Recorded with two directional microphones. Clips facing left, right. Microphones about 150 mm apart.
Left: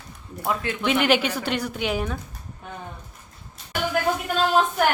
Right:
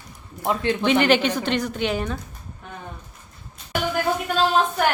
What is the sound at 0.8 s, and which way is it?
A woman's voice, 5° left (ahead or behind).